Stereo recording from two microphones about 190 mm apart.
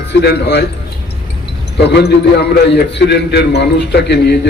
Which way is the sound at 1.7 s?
60° left (ahead or behind).